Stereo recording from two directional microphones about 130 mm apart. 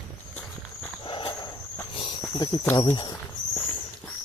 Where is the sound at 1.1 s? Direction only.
40° left (ahead or behind).